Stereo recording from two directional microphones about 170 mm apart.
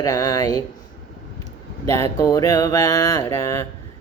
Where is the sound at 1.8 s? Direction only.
20° left (ahead or behind).